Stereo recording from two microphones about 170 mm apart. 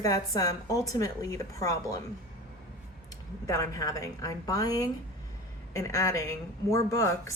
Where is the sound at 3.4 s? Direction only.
20° left (ahead or behind).